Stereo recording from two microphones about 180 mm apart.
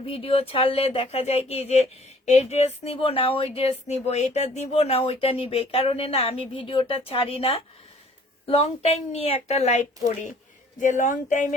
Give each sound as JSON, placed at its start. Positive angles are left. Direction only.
{"t": 0.0, "sound": "speech", "side_deg": 30}